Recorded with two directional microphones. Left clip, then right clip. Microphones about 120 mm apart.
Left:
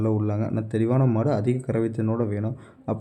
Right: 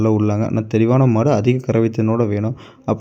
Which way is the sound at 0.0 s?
25° right (ahead or behind).